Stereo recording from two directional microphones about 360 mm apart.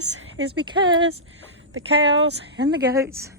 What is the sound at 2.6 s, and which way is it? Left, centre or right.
Speech, centre.